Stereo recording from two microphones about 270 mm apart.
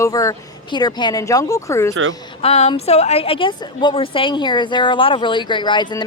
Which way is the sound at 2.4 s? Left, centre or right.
Left.